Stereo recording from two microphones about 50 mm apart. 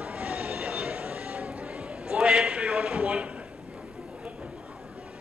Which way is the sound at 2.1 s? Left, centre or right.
Centre.